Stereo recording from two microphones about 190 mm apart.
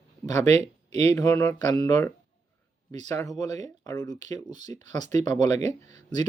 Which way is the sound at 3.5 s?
35° right (ahead or behind).